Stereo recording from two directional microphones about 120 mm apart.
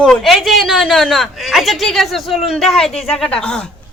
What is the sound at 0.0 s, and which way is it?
A woman's voice, 5° left (ahead or behind).